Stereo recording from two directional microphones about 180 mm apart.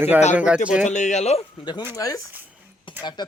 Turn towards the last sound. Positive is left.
turn(degrees=25)  # may be behind; listen again after turning